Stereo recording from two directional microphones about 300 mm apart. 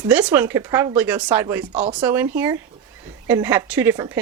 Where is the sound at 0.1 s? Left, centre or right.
Centre.